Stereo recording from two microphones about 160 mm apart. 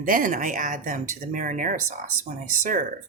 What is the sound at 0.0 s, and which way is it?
Speech, 60° right (ahead or behind).